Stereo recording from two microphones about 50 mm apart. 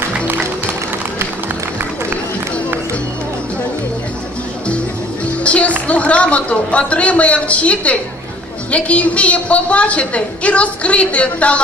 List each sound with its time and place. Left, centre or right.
5.4 s music: left
5.9 s a man's voice: left